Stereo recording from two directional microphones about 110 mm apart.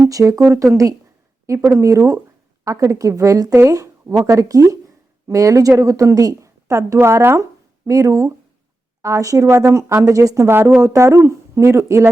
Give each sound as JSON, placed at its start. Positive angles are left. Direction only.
{"t": 0.1, "sound": "a woman's voice", "side_deg": -30}